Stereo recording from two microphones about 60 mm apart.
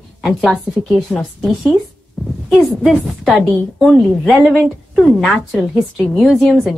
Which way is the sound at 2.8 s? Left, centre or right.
Centre.